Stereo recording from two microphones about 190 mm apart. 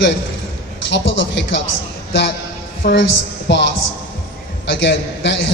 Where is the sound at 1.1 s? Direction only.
70° left (ahead or behind).